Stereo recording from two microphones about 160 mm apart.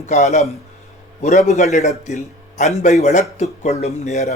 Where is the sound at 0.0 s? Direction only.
45° left (ahead or behind).